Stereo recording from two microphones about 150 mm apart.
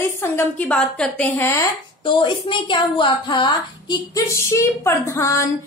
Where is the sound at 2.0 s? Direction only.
35° left (ahead or behind).